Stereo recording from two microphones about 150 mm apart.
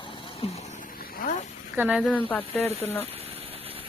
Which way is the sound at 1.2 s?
70° left (ahead or behind).